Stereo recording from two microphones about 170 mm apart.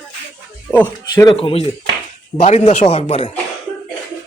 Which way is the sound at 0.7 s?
10° left (ahead or behind).